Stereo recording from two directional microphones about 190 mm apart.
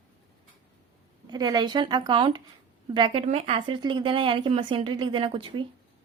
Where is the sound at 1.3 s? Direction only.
20° right (ahead or behind).